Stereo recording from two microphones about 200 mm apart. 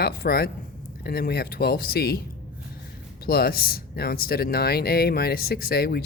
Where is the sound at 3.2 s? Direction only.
50° left (ahead or behind).